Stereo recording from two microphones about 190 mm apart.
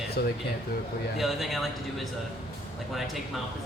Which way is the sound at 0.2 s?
55° left (ahead or behind).